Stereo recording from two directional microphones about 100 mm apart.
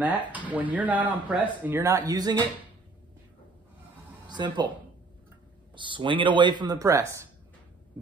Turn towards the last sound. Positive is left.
turn(degrees=-35)  # may be behind; listen again after turning